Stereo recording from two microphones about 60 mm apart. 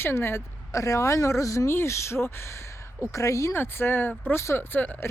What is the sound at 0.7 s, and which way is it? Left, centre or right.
Speech, left.